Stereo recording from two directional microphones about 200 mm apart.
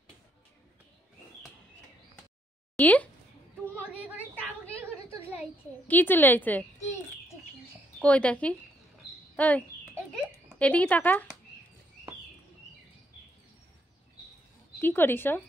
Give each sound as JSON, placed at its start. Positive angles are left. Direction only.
{"t": 2.8, "sound": "a woman's voice", "side_deg": 10}
{"t": 5.1, "sound": "a sound", "side_deg": -10}
{"t": 5.9, "sound": "a woman's voice", "side_deg": 10}
{"t": 8.0, "sound": "a woman's voice", "side_deg": 5}
{"t": 10.1, "sound": "a sound", "side_deg": 5}
{"t": 14.8, "sound": "a woman's voice", "side_deg": 10}